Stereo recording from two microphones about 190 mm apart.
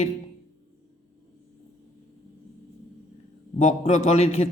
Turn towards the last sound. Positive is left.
turn(degrees=35)  # may be behind; listen again after turning